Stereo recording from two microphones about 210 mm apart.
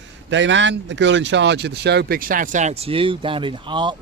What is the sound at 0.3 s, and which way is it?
Speech, 60° right (ahead or behind).